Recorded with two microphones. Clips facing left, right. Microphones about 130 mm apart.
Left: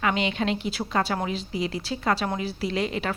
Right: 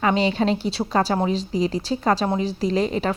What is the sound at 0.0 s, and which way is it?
A woman's voice, 35° right (ahead or behind).